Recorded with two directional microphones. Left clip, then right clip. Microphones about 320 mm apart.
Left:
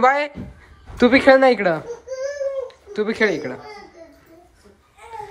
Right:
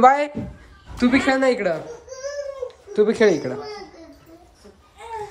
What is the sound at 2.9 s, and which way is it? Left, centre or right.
Speech, centre.